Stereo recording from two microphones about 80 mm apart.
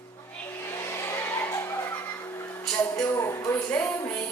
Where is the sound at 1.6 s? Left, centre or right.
Left.